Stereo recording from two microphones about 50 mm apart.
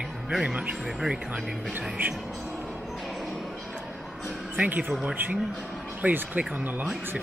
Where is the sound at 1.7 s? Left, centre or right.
Right.